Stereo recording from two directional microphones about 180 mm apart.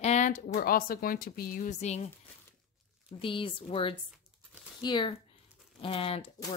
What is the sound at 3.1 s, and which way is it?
A woman's voice, 30° left (ahead or behind).